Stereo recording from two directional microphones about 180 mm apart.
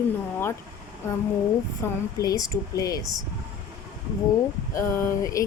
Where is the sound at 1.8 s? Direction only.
15° left (ahead or behind).